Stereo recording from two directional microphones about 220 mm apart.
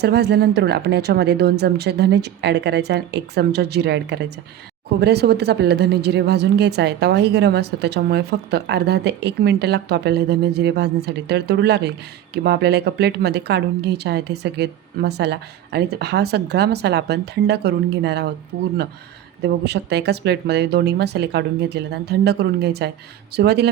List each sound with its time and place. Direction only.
0.0 s a woman's voice: 50° right (ahead or behind)
19.4 s a woman's voice: 50° right (ahead or behind)